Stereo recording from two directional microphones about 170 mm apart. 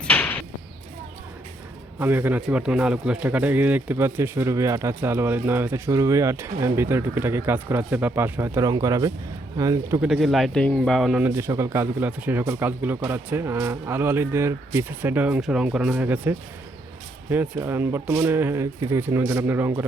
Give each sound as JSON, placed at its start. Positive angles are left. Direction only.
{"t": 0.0, "sound": "door", "side_deg": 10}
{"t": 2.0, "sound": "a man's voice", "side_deg": -10}
{"t": 10.0, "sound": "a man's voice", "side_deg": 0}